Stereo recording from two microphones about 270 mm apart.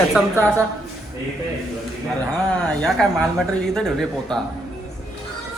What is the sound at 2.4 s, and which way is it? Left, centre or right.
A man's voice, centre.